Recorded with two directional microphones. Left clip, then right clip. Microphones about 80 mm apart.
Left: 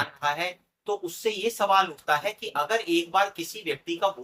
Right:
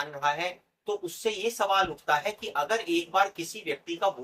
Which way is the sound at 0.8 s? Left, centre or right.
Left.